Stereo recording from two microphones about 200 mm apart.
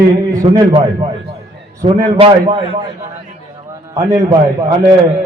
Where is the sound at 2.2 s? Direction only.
25° right (ahead or behind).